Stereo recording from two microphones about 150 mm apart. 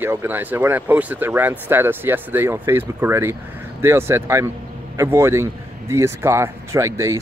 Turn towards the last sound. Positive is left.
turn(degrees=-20)  # may be behind; listen again after turning